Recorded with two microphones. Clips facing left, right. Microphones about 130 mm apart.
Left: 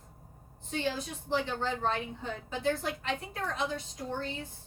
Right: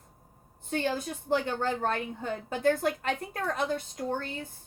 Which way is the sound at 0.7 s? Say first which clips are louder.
Right 3 dB; 55° right (ahead or behind).